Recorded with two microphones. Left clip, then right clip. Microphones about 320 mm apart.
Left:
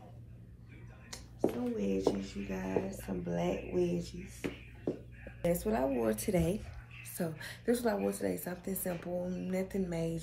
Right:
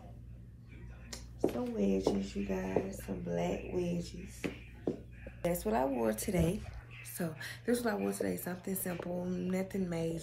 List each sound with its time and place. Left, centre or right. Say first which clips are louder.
1.1 s speech: even; centre
5.4 s speech: even; centre